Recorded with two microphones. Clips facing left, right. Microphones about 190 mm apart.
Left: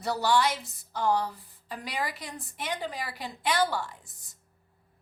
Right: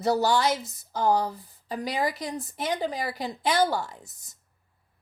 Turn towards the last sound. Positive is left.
turn(degrees=-40)  # may be behind; listen again after turning